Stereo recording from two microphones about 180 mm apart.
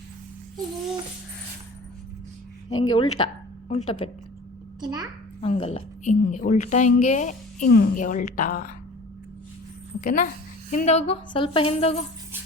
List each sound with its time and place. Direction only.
2.6 s speech: 25° left (ahead or behind)
4.8 s a child's voice: 20° right (ahead or behind)
5.4 s a woman's voice: 35° left (ahead or behind)
10.0 s a woman's voice: 45° left (ahead or behind)